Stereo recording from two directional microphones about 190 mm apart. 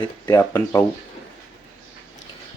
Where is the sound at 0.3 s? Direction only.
15° left (ahead or behind).